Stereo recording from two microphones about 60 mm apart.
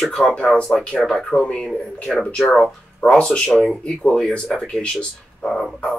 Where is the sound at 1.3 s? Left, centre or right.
Centre.